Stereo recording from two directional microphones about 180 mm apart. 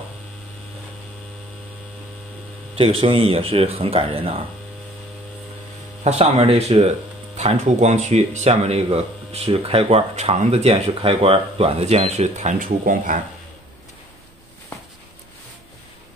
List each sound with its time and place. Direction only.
2.7 s speech: 30° right (ahead or behind)
6.0 s speech: 35° right (ahead or behind)